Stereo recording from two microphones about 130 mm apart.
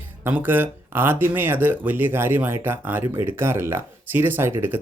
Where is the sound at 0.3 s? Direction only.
15° right (ahead or behind).